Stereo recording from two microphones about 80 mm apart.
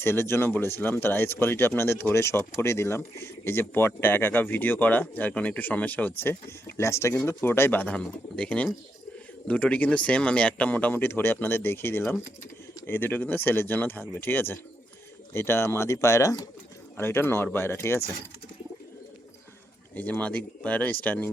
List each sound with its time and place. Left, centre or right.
0.0 s speech: left
17.0 s speech: left
20.0 s speech: centre